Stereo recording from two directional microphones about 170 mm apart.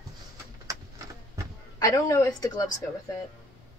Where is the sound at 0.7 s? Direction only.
20° right (ahead or behind).